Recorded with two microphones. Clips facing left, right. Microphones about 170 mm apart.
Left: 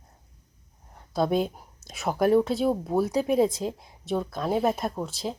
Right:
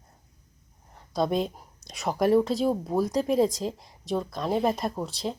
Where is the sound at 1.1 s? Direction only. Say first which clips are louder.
Left 1 dB; 5° left (ahead or behind).